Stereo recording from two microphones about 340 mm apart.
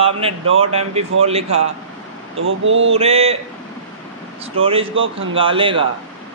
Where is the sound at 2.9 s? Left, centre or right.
Centre.